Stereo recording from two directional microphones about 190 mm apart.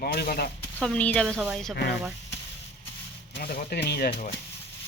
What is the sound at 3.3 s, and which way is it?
Speech, 55° left (ahead or behind).